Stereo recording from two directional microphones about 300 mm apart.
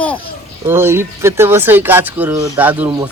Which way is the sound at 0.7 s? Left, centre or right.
Centre.